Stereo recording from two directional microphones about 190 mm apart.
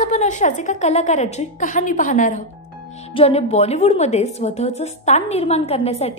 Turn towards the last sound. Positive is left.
turn(degrees=35)  # may be behind; listen again after turning